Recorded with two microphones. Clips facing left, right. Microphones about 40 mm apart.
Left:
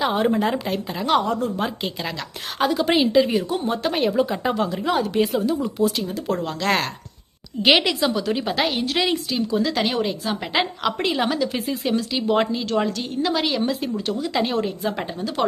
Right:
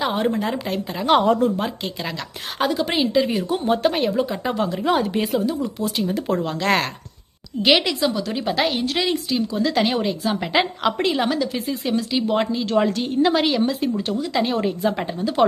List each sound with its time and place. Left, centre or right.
0.0 s a woman's voice: centre
1.2 s speech: right
1.5 s a woman's voice: centre
12.6 s a woman's voice: centre
13.5 s a woman's voice: centre